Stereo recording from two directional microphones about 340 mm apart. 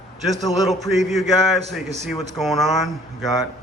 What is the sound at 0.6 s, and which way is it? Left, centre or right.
Speech, centre.